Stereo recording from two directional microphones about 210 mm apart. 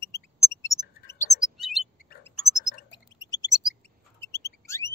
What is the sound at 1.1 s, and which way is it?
Chirp, 15° left (ahead or behind).